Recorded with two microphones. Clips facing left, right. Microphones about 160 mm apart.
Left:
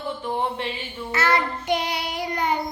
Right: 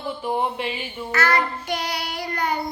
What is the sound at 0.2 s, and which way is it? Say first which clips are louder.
Speech: right 3 dB; 10° right (ahead or behind).